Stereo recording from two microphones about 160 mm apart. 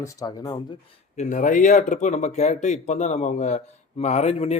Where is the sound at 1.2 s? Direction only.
55° left (ahead or behind).